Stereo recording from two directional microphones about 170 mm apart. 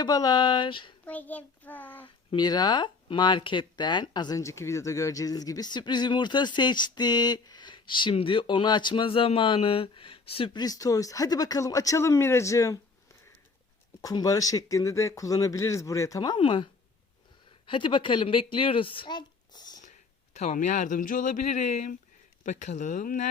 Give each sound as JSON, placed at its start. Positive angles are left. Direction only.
{"t": 0.0, "sound": "speech", "side_deg": 25}
{"t": 1.0, "sound": "a child's voice", "side_deg": 10}
{"t": 2.3, "sound": "speech", "side_deg": 25}
{"t": 14.0, "sound": "speech", "side_deg": 20}
{"t": 17.7, "sound": "speech", "side_deg": 30}
{"t": 20.3, "sound": "speech", "side_deg": 45}